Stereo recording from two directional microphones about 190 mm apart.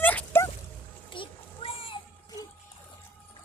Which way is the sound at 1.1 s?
30° left (ahead or behind).